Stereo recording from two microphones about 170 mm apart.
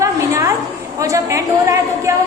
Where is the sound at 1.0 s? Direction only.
20° right (ahead or behind).